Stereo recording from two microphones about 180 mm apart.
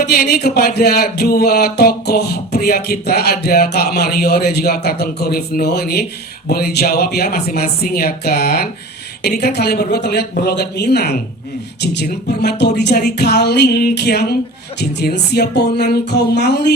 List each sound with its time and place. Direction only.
0.0 s speech: 60° left (ahead or behind)